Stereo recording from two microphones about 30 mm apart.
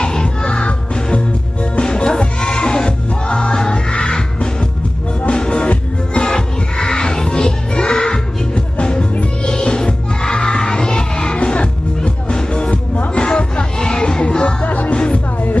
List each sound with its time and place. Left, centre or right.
0.0 s music: left
14.6 s music: left
14.9 s music: left